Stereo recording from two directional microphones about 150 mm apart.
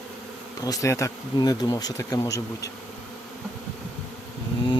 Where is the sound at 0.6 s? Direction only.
25° left (ahead or behind).